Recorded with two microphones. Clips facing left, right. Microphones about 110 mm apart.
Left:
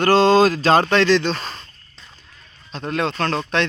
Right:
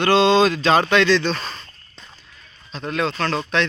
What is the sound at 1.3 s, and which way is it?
Speech, 20° left (ahead or behind).